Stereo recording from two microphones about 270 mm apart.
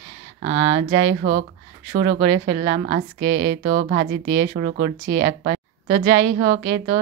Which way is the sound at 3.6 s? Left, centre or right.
Right.